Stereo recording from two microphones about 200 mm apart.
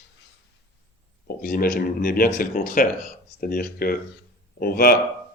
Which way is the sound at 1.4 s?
45° left (ahead or behind).